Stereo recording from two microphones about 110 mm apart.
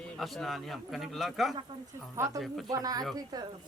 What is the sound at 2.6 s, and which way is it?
Speech, 35° right (ahead or behind).